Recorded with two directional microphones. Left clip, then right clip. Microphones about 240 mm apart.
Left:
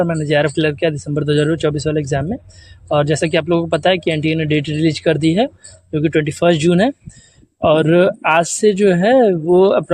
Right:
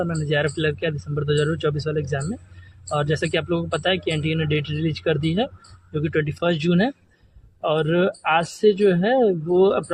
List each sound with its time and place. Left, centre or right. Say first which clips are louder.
0.0 s speech: left 7 dB; left